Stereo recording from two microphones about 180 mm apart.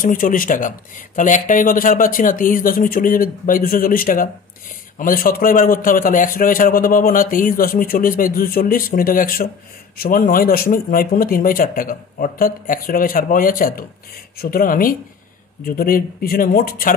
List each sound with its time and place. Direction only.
0.0 s a man's voice: 50° left (ahead or behind)